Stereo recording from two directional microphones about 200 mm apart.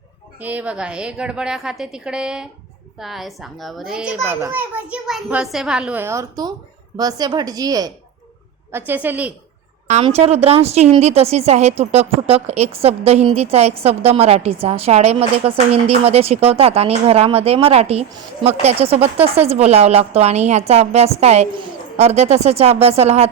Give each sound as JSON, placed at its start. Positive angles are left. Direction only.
{"t": 0.3, "sound": "a woman's voice", "side_deg": -5}
{"t": 9.8, "sound": "a woman's voice", "side_deg": -30}